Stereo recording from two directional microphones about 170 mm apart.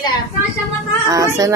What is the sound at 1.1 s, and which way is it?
Speech, 20° right (ahead or behind).